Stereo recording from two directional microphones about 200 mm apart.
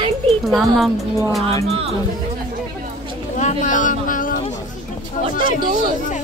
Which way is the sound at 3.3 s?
40° left (ahead or behind).